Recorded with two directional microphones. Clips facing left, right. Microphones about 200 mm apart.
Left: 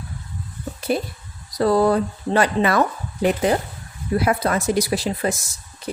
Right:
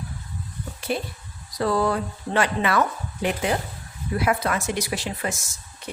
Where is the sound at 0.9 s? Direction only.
40° left (ahead or behind).